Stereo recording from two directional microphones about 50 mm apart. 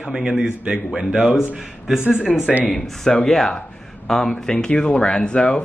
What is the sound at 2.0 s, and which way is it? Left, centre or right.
Speech, left.